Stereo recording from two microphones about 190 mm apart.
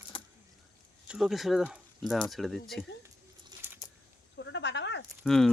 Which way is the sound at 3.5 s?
20° right (ahead or behind).